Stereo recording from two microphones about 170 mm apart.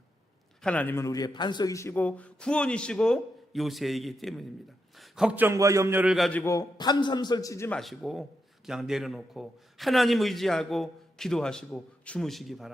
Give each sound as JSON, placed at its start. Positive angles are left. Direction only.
{"t": 0.6, "sound": "a man's voice", "side_deg": 10}
{"t": 6.4, "sound": "a man's voice", "side_deg": 20}
{"t": 7.8, "sound": "a man's voice", "side_deg": 0}